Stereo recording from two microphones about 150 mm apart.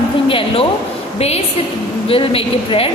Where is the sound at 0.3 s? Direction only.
35° left (ahead or behind).